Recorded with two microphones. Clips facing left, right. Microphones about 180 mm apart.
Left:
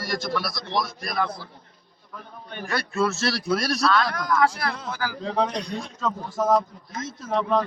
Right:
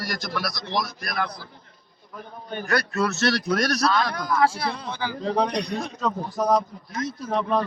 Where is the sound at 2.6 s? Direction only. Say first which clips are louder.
Even; 25° left (ahead or behind).